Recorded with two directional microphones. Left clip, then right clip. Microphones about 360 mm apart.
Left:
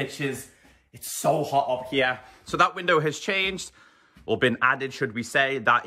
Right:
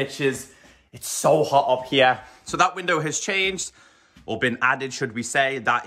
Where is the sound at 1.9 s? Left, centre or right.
Right.